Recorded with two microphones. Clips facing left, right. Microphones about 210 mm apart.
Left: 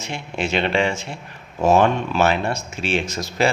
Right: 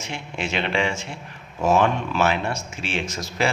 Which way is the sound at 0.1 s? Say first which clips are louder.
Left 5 dB; 35° left (ahead or behind).